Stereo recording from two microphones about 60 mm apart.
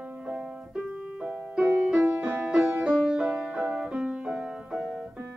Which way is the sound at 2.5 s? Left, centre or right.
Centre.